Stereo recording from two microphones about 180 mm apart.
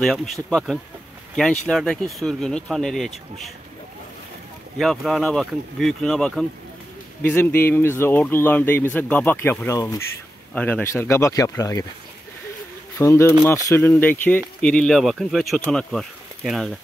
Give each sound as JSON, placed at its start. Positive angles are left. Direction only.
{"t": 0.0, "sound": "speech", "side_deg": 0}
{"t": 4.7, "sound": "speech", "side_deg": 0}
{"t": 12.9, "sound": "speech", "side_deg": 15}